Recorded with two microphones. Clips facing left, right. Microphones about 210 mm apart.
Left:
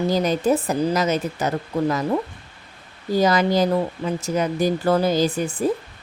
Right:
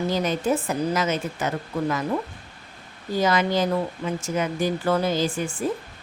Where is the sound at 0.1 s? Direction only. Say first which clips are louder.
Left 5 dB; 35° left (ahead or behind).